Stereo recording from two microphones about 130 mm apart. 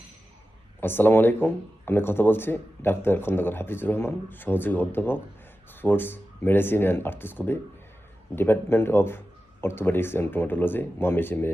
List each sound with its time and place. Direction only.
0.8 s speech: 15° left (ahead or behind)